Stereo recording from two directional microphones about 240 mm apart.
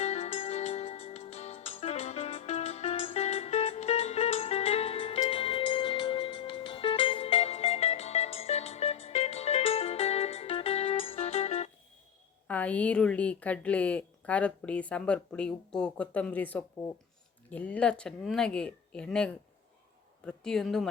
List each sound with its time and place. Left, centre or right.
0.0 s music: left
12.5 s a woman's voice: centre